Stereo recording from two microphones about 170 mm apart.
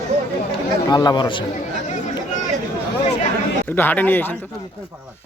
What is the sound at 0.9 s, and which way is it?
Speech, 25° left (ahead or behind).